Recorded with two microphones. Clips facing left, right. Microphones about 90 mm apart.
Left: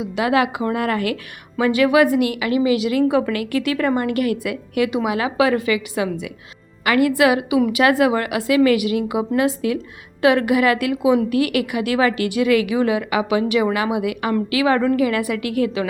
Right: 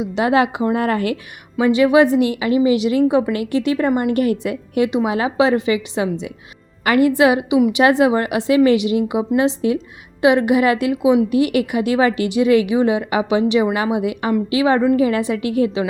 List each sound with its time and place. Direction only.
0.0 s a woman's voice: 30° right (ahead or behind)